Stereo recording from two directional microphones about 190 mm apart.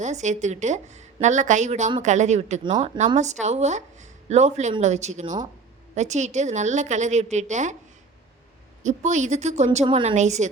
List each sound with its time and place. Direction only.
0.0 s a woman's voice: 40° right (ahead or behind)
8.8 s a woman's voice: 40° right (ahead or behind)